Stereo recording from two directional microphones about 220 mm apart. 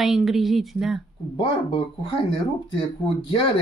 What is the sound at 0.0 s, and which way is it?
Speech, centre (ahead or behind).